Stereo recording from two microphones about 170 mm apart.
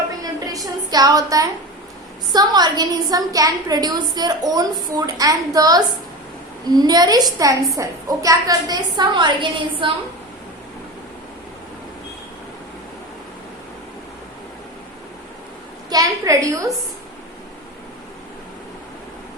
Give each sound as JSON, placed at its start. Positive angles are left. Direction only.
{"t": 0.2, "sound": "a sound", "side_deg": -20}
{"t": 2.3, "sound": "a woman's voice", "side_deg": -25}
{"t": 15.9, "sound": "a woman's voice", "side_deg": -20}